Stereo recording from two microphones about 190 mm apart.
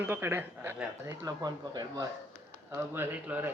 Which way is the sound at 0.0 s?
10° right (ahead or behind).